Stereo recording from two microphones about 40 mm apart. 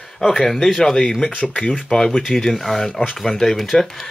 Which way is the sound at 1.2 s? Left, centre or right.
Left.